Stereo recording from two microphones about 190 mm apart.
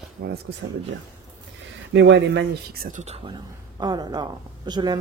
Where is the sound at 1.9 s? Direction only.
70° right (ahead or behind); by 3.0 s 50° right (ahead or behind).